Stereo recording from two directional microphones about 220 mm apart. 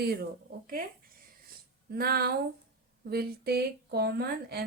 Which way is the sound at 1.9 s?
45° right (ahead or behind).